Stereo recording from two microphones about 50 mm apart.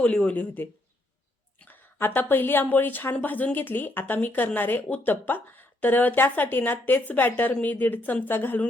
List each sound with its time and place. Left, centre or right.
0.0 s speech: left
1.6 s a woman's voice: left